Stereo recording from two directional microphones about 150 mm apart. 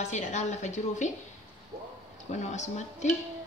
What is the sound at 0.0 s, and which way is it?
A woman's voice, 50° left (ahead or behind).